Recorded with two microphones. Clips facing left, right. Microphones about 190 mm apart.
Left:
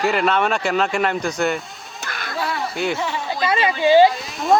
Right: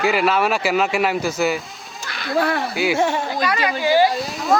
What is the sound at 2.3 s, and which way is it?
Speech, 60° right (ahead or behind).